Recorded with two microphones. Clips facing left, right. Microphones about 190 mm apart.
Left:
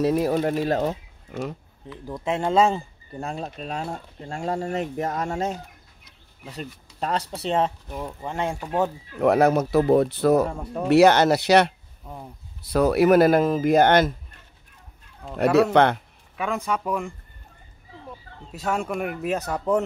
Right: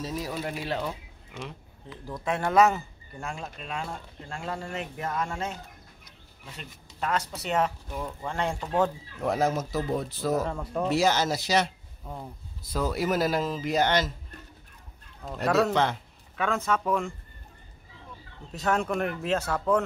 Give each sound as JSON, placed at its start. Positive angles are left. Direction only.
{"t": 0.0, "sound": "speech", "side_deg": 60}
{"t": 2.0, "sound": "speech", "side_deg": 20}
{"t": 9.2, "sound": "speech", "side_deg": 65}
{"t": 15.4, "sound": "speech", "side_deg": 5}
{"t": 15.7, "sound": "speech", "side_deg": 60}
{"t": 16.3, "sound": "speech", "side_deg": 15}
{"t": 18.5, "sound": "speech", "side_deg": 10}